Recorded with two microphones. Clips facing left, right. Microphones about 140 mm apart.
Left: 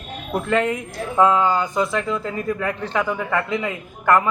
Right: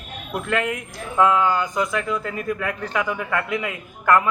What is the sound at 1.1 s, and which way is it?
A man's voice, 25° left (ahead or behind).